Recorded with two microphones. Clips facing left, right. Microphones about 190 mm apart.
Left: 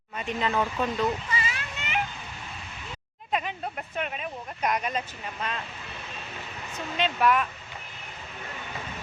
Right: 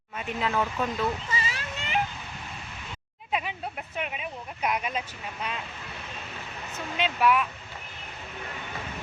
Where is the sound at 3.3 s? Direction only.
5° right (ahead or behind).